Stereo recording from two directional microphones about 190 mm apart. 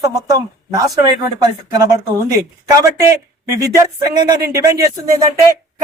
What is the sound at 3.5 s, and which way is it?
Speech, 15° right (ahead or behind).